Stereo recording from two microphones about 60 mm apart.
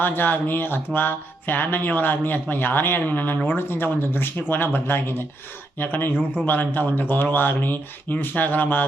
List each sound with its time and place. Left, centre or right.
0.0 s speech: left